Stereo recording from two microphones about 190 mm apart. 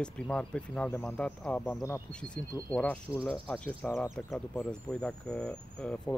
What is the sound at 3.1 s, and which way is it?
Speech, 5° right (ahead or behind).